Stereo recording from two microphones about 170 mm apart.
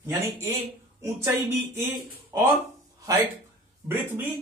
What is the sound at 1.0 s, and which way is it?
Speech, 15° right (ahead or behind).